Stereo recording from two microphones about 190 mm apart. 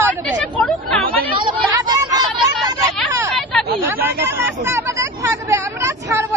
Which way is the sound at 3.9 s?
10° right (ahead or behind).